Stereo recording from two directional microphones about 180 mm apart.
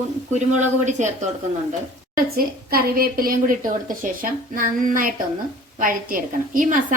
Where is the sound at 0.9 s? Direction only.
40° right (ahead or behind).